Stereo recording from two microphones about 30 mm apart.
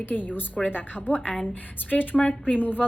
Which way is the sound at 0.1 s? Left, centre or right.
Left.